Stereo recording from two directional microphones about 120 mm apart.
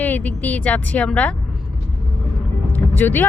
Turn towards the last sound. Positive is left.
turn(degrees=15)  # may be behind; listen again after turning